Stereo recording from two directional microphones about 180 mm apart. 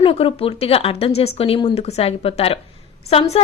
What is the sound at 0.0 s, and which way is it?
Speech, 30° left (ahead or behind).